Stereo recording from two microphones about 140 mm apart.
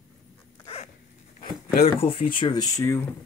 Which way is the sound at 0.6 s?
50° left (ahead or behind).